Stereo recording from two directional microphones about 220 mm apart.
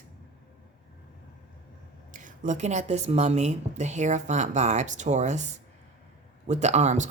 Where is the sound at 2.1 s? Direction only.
35° right (ahead or behind).